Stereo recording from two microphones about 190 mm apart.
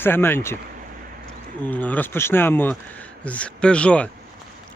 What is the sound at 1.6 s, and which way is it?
Speech, 10° left (ahead or behind).